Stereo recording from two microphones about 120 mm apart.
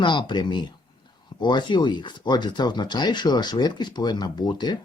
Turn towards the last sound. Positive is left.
turn(degrees=35)  # may be behind; listen again after turning